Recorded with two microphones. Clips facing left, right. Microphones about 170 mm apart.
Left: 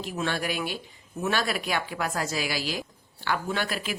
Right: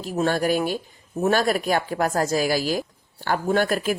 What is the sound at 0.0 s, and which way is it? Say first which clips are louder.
Speech: right 7 dB; 40° right (ahead or behind).